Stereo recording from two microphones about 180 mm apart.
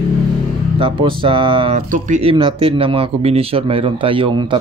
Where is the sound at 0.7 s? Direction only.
30° right (ahead or behind).